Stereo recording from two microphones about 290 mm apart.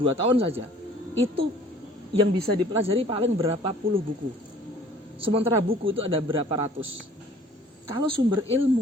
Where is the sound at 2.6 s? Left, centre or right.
Centre.